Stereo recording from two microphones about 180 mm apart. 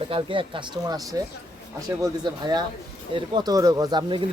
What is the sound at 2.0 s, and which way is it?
Speech, 20° right (ahead or behind).